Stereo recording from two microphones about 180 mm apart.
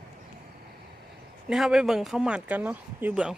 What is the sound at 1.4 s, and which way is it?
Speech, centre (ahead or behind).